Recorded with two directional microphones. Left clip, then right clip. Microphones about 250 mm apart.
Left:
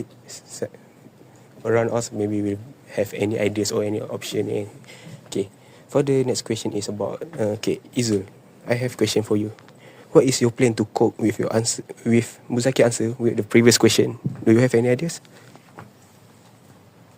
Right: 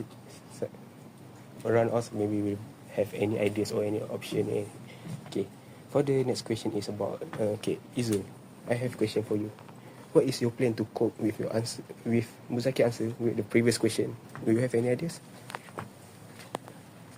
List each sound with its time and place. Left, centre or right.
0.3 s whispering: left
1.6 s speech: left